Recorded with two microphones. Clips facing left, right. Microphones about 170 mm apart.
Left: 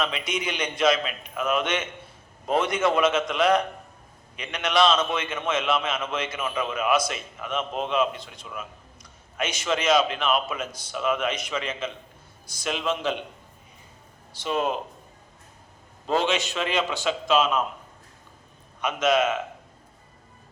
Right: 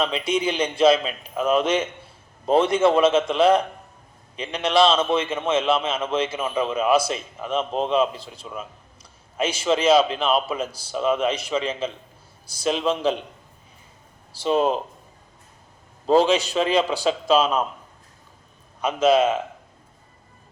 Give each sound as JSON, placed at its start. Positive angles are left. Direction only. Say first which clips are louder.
{"t": 0.0, "sound": "a man's voice", "louder": "right 6 dB", "side_deg": -30}
{"t": 14.4, "sound": "speech", "louder": "right 6 dB", "side_deg": -30}
{"t": 16.0, "sound": "speech", "louder": "right 7 dB", "side_deg": -35}
{"t": 18.8, "sound": "speech", "louder": "right 4 dB", "side_deg": -30}